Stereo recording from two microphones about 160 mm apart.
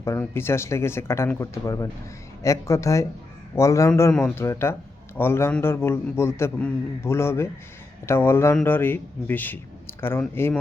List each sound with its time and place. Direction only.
0.0 s speech: 15° left (ahead or behind)